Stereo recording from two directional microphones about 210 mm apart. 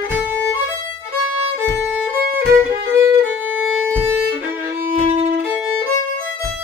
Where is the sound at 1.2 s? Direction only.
90° left.